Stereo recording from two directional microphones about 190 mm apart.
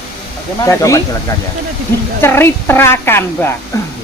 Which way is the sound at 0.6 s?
15° left (ahead or behind).